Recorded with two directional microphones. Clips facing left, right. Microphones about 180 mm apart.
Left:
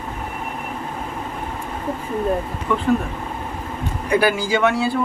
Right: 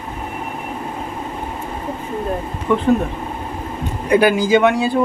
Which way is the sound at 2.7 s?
20° right (ahead or behind).